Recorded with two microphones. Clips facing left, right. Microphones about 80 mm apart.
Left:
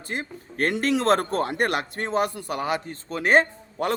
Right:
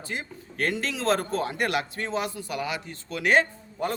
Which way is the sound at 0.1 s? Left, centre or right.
Left.